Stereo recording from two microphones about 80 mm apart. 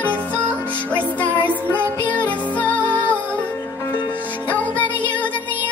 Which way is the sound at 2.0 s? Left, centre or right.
Centre.